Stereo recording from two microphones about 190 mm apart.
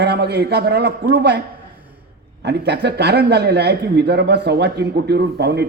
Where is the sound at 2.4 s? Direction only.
60° right (ahead or behind).